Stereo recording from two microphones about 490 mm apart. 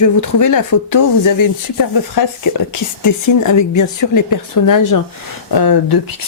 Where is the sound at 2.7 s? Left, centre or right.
Left.